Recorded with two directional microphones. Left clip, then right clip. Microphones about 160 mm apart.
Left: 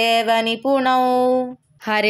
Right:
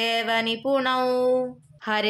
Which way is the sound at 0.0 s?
35° left (ahead or behind).